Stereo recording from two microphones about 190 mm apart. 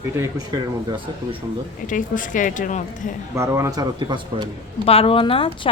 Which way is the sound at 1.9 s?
45° left (ahead or behind).